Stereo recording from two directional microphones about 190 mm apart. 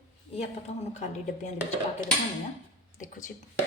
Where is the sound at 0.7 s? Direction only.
35° left (ahead or behind).